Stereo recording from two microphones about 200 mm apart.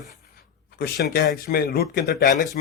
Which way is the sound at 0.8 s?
55° left (ahead or behind).